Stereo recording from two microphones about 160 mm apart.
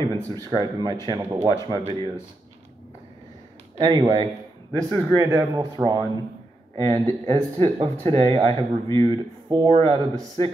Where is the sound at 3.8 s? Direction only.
25° right (ahead or behind).